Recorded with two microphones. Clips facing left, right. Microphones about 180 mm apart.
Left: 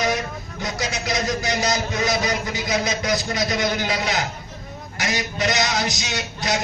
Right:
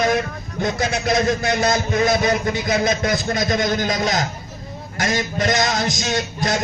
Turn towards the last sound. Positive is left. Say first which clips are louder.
# right 4 dB
turn(degrees=-45)  # may be behind; listen again after turning